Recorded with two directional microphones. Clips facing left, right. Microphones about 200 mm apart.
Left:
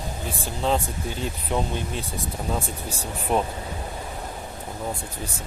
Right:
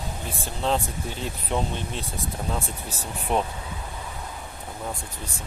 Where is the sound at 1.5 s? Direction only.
5° left (ahead or behind).